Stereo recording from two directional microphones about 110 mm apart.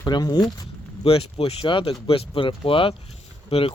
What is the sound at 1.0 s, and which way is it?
Speech, 60° left (ahead or behind).